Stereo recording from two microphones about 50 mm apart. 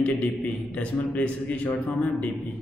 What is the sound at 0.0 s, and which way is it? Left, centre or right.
A man's voice, left.